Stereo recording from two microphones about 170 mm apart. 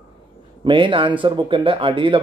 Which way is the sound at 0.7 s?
30° right (ahead or behind).